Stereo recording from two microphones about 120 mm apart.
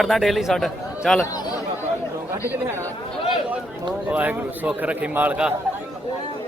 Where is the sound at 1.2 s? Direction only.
30° left (ahead or behind).